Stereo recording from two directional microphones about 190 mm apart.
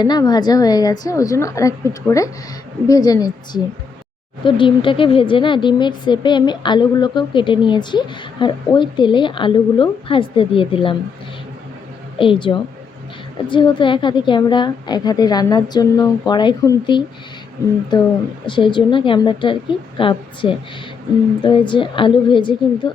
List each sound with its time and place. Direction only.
0.0 s a woman's voice: 20° left (ahead or behind)
12.2 s a woman's voice: 25° left (ahead or behind)